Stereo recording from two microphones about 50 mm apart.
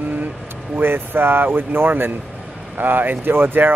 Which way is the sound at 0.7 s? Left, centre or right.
Right.